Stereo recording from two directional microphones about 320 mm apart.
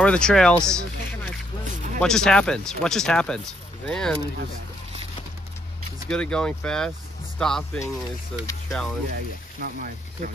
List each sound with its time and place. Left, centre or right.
0.0 s speech: centre
2.0 s speech: centre
6.0 s speech: centre
9.6 s speech: right